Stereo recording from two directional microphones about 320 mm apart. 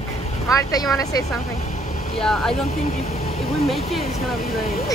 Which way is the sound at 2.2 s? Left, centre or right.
Centre.